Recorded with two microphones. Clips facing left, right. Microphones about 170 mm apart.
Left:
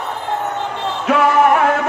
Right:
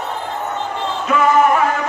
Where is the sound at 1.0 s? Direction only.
70° left (ahead or behind).